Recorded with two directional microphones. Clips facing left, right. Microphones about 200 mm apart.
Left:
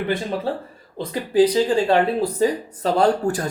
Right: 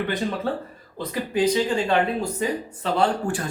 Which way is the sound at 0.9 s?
35° left (ahead or behind).